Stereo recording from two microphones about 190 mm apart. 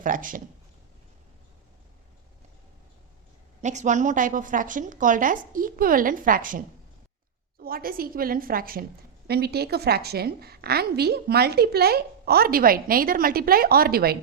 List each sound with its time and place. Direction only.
0.0 s a woman's voice: 45° right (ahead or behind)
3.6 s a woman's voice: 40° right (ahead or behind)
7.6 s a woman's voice: 50° right (ahead or behind)